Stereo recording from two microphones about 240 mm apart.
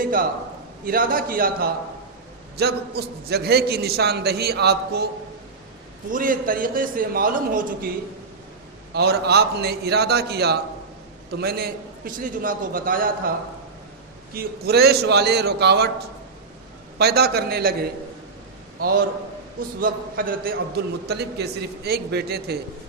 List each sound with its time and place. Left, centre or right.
0.0 s a sound: right
0.9 s a man's voice: right
6.1 s a man's voice: right
8.9 s a man's voice: right
14.3 s a man's voice: right